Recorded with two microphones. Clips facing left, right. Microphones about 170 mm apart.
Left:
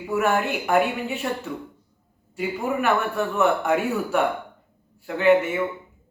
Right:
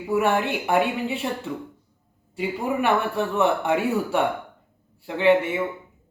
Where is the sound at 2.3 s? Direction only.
30° right (ahead or behind).